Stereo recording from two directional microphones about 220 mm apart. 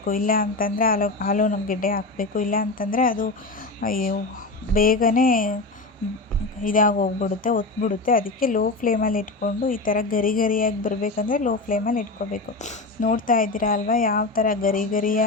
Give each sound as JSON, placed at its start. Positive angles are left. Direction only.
{"t": 0.0, "sound": "speech", "side_deg": 40}
{"t": 6.6, "sound": "speech", "side_deg": 40}